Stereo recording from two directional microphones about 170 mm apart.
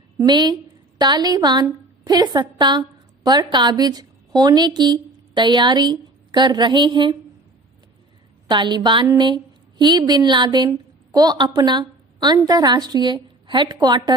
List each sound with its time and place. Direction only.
0.2 s a woman's voice: 25° right (ahead or behind)
8.4 s a woman's voice: 25° right (ahead or behind)